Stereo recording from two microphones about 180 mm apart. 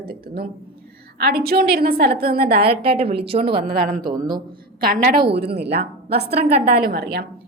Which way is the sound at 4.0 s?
25° right (ahead or behind).